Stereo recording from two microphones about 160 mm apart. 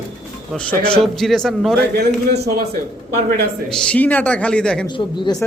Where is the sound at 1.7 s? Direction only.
90° right.